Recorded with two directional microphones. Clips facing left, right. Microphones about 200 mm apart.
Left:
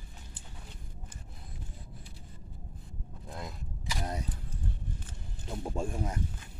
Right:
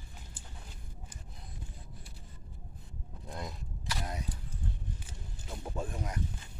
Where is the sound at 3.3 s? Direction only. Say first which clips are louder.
Even; centre (ahead or behind).